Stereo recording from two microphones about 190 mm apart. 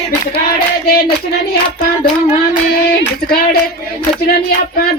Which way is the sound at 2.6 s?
55° left (ahead or behind).